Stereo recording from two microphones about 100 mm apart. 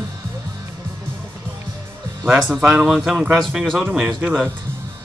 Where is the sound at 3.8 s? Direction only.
20° right (ahead or behind).